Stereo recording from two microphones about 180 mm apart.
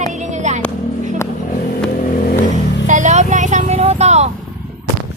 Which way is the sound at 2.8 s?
45° right (ahead or behind).